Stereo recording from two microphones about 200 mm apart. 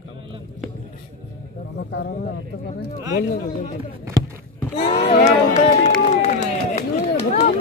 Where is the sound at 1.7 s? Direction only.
55° left (ahead or behind).